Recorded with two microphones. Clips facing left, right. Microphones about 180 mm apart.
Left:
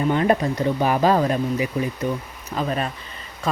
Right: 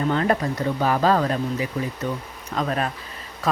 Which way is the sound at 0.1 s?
20° left (ahead or behind).